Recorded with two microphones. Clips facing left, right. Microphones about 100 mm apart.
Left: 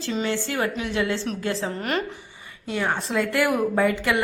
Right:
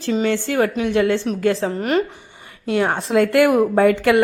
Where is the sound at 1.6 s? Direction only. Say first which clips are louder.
Right 7 dB; 35° right (ahead or behind).